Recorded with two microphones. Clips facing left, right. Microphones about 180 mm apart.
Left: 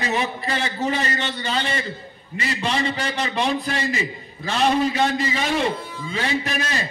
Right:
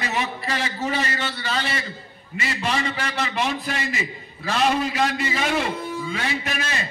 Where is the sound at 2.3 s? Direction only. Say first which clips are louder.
Left 1 dB; 35° left (ahead or behind).